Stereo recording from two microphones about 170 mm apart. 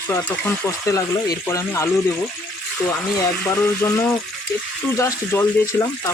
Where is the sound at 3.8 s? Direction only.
15° left (ahead or behind).